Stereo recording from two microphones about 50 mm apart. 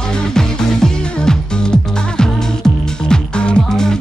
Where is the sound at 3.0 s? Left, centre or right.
Centre.